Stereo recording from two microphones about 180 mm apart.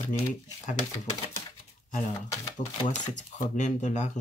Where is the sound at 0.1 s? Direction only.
45° left (ahead or behind).